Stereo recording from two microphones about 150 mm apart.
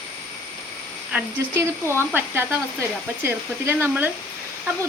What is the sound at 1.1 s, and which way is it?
Speech, 15° right (ahead or behind).